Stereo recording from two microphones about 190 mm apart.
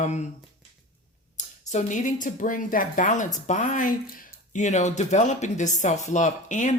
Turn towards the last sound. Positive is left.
turn(degrees=40)  # may be behind; listen again after turning